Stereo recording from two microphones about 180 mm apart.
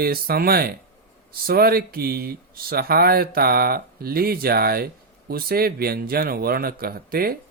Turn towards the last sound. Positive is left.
turn(degrees=-55)  # may be behind; listen again after turning